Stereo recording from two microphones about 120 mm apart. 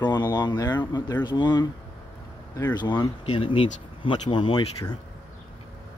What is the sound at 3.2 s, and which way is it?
Speech, 50° left (ahead or behind).